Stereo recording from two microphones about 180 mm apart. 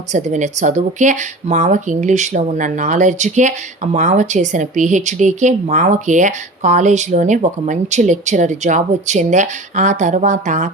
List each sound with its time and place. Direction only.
0.1 s speech: 40° right (ahead or behind)